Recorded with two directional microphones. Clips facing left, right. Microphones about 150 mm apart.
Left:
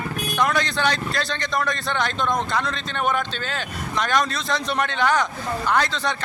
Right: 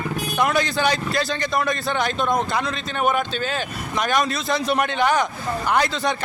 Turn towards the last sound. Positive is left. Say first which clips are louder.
# right 1 dB
turn(degrees=-10)  # may be behind; listen again after turning